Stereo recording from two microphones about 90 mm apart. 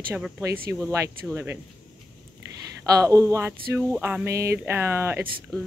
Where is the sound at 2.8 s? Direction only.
40° right (ahead or behind).